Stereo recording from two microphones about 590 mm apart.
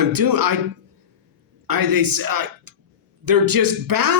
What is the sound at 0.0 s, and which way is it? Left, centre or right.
Speech, right.